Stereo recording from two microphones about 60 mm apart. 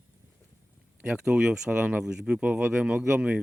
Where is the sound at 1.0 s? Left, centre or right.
Centre.